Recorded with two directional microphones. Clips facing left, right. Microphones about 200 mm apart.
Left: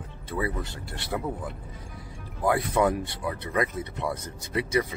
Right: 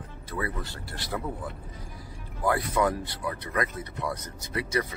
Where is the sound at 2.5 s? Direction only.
20° left (ahead or behind).